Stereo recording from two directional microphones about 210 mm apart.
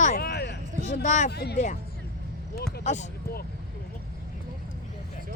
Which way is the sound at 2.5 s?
50° left (ahead or behind).